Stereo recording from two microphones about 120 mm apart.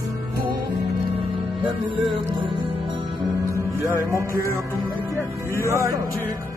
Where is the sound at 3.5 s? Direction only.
25° right (ahead or behind).